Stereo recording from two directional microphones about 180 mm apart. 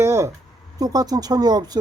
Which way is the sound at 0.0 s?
15° right (ahead or behind).